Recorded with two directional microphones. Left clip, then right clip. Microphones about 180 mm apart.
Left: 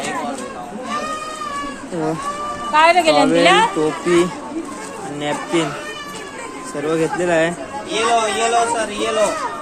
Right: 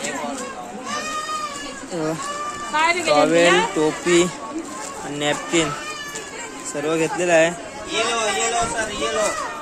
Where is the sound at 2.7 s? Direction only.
65° left (ahead or behind).